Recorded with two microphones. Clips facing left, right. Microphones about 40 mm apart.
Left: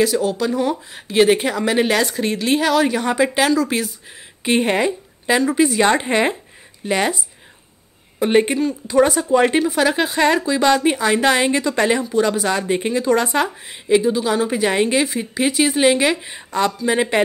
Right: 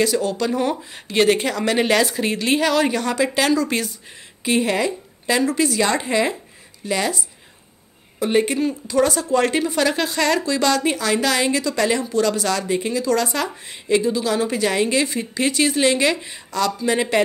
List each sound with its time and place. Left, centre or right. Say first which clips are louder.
0.0 s speech: left 2 dB; centre
3.0 s a woman's voice: left 3 dB; centre
3.4 s speech: left 1 dB; centre
4.5 s a woman's voice: left 2 dB; left
8.2 s a woman's voice: left 3 dB; left
8.8 s a woman's voice: left 5 dB; left
12.0 s a woman's voice: left 2 dB; centre
13.7 s a woman's voice: left 1 dB; centre
15.0 s a woman's voice: left 2 dB; centre
16.3 s a woman's voice: left 2 dB; left